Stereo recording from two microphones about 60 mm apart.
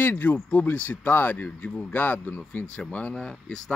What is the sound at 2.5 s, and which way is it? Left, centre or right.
Speech, left.